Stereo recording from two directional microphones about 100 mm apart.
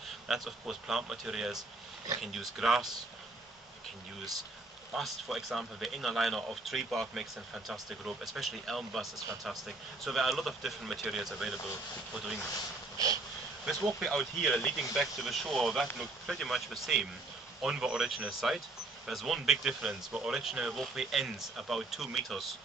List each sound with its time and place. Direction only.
0.3 s a man's voice: 5° right (ahead or behind)
4.9 s a man's voice: centre (ahead or behind)
12.9 s a sound: 35° right (ahead or behind)
13.7 s a man's voice: centre (ahead or behind)